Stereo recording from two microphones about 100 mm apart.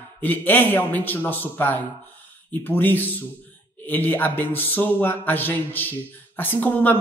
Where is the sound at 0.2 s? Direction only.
20° left (ahead or behind).